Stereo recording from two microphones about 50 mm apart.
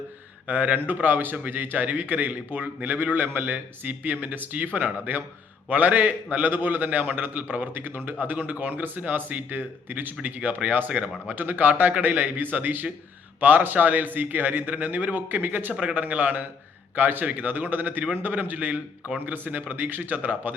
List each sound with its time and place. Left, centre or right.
0.4 s speech: right
15.7 s speech: centre
16.0 s speech: right